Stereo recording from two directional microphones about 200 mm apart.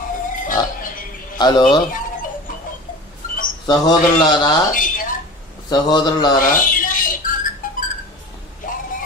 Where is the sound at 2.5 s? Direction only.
40° left (ahead or behind).